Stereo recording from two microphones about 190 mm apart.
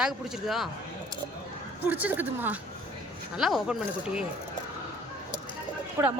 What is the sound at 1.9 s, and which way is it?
A woman's voice, 10° right (ahead or behind).